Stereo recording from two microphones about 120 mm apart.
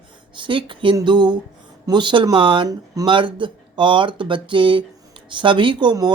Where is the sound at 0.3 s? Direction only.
45° right (ahead or behind).